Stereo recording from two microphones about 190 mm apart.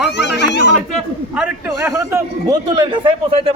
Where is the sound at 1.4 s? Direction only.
5° right (ahead or behind).